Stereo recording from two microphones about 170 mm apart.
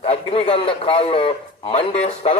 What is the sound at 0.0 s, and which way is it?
A man's voice, 35° left (ahead or behind).